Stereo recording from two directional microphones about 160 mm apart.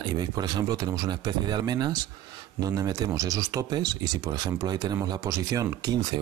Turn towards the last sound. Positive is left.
turn(degrees=-25)  # may be behind; listen again after turning